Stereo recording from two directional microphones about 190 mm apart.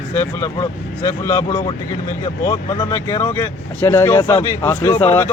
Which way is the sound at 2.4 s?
20° left (ahead or behind).